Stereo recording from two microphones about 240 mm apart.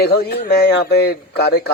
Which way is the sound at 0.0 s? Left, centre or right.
Left.